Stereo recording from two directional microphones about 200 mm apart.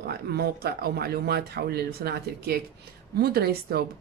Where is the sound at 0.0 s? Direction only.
50° right (ahead or behind).